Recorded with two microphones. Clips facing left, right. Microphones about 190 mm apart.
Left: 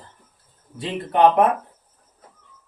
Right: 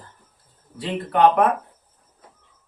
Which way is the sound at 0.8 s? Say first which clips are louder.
Left 1 dB; 20° left (ahead or behind).